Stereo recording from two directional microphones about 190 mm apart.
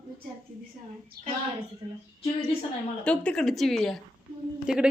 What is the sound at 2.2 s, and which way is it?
Speech, 30° left (ahead or behind).